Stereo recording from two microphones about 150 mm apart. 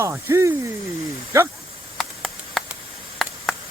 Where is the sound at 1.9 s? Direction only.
Centre (ahead or behind).